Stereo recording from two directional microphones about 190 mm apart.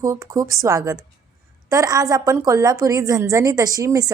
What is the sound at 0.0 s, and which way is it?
A woman's voice, 15° right (ahead or behind).